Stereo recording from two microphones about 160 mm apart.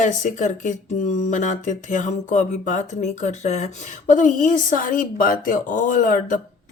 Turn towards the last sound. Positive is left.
turn(degrees=55)  # may be behind; listen again after turning